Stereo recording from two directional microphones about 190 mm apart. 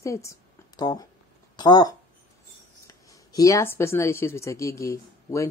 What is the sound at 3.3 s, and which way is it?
A woman's voice, 15° left (ahead or behind).